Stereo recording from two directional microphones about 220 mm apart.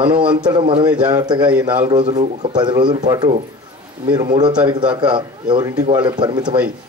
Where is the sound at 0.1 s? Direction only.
20° right (ahead or behind).